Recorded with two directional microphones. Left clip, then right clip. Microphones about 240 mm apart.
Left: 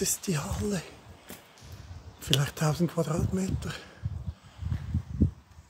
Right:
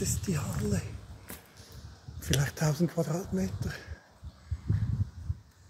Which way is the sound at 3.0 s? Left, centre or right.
Left.